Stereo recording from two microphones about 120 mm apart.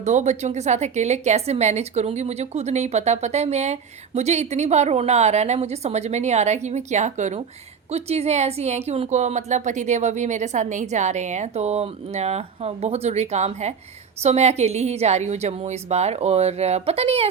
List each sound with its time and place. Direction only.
0.0 s a woman's voice: 70° right (ahead or behind)
7.9 s a woman's voice: 60° right (ahead or behind)